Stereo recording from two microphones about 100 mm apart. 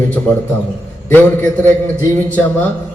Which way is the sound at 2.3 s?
15° left (ahead or behind).